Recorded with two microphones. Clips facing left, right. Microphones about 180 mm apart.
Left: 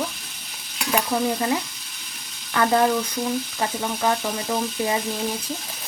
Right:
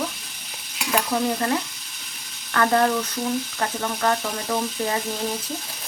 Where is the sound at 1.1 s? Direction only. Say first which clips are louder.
Even; 10° left (ahead or behind).